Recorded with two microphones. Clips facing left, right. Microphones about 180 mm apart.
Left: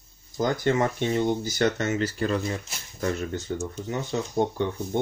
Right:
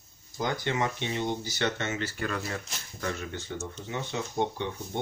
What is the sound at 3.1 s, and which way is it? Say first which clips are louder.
Speech: left 6 dB; 35° left (ahead or behind).